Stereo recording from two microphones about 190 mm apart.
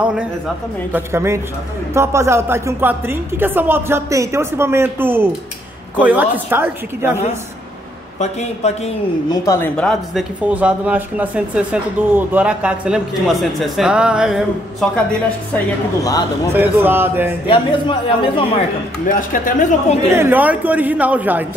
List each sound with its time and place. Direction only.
0.0 s a woman's voice: 5° right (ahead or behind)
8.2 s speech: 35° left (ahead or behind)
9.3 s speech: 15° left (ahead or behind)
9.8 s speech: 5° left (ahead or behind)
10.4 s speech: 5° right (ahead or behind)
15.5 s speech: 20° left (ahead or behind)
16.5 s a woman's voice: 10° right (ahead or behind)
17.5 s speech: 30° left (ahead or behind)
19.0 s speech: 45° left (ahead or behind)
20.2 s a woman's voice: 10° right (ahead or behind)